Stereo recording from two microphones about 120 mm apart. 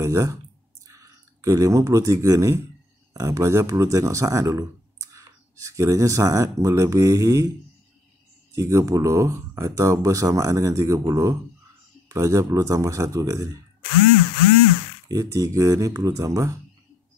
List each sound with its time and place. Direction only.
0.0 s speech: 25° right (ahead or behind)
8.5 s speech: 25° right (ahead or behind)
15.0 s speech: 30° right (ahead or behind)